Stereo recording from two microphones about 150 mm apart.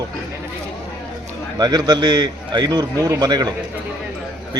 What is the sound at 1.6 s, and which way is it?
A man's voice, 25° right (ahead or behind).